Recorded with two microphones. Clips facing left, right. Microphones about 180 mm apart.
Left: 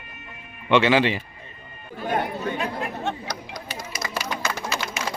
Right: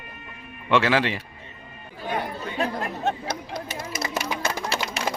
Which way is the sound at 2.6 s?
35° right (ahead or behind).